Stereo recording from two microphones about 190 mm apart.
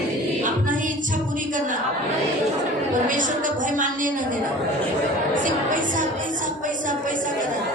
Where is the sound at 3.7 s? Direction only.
45° right (ahead or behind).